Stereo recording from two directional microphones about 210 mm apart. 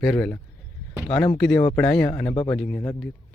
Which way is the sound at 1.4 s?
10° left (ahead or behind).